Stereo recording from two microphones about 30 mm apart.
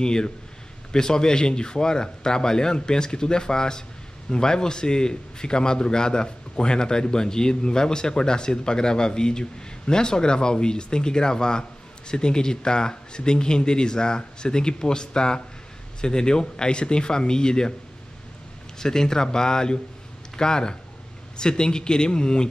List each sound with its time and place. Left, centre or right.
0.0 s a man's voice: left
18.8 s a man's voice: left